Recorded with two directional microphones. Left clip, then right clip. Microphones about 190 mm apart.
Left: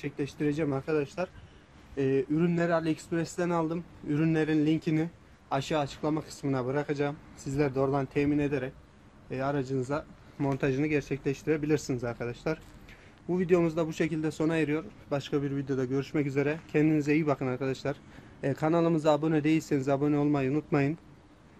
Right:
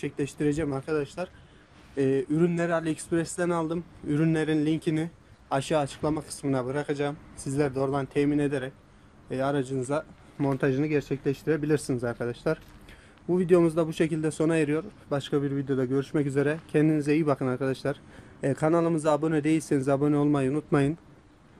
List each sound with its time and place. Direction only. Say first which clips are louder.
0.0 s a man's voice: right 3 dB; 35° right (ahead or behind)
10.7 s a man's voice: right 2 dB; 45° right (ahead or behind)